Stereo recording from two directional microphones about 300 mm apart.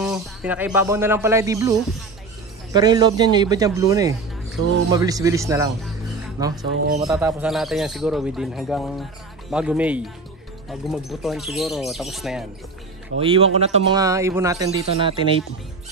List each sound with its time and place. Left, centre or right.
0.0 s a man's voice: centre
6.8 s speech: right
7.1 s speech: centre
13.2 s speech: centre